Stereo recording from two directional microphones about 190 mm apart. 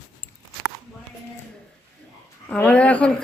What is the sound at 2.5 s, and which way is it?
Speech, 5° left (ahead or behind).